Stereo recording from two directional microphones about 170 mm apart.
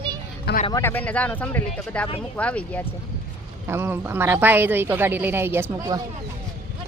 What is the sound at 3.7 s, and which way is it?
Speech, 15° right (ahead or behind).